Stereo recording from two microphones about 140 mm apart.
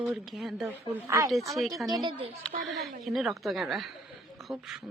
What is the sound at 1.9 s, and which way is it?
Speech, 35° right (ahead or behind).